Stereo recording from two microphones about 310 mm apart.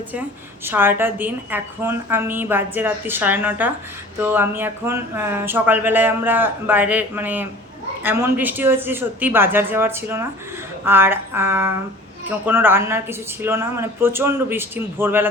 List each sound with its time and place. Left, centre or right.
0.6 s speech: centre